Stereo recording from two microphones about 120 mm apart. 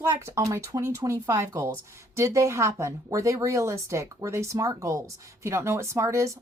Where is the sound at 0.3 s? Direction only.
25° right (ahead or behind).